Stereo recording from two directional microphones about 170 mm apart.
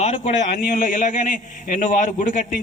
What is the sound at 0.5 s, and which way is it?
A man's voice, 55° left (ahead or behind).